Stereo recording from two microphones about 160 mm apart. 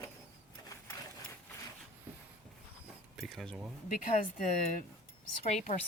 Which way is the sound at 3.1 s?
Centre (ahead or behind).